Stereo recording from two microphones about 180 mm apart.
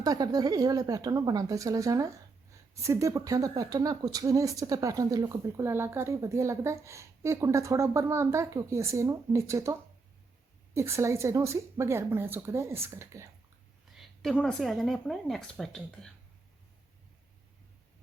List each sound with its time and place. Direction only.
0.0 s a woman's voice: 20° right (ahead or behind)
10.8 s a woman's voice: 15° right (ahead or behind)
13.9 s a woman's voice: centre (ahead or behind)